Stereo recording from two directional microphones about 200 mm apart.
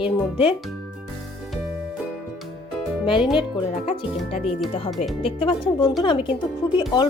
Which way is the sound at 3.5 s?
25° left (ahead or behind).